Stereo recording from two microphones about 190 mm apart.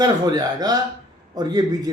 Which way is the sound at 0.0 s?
20° right (ahead or behind).